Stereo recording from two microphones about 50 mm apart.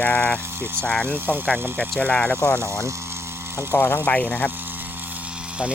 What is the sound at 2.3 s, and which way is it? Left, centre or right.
Speech, left.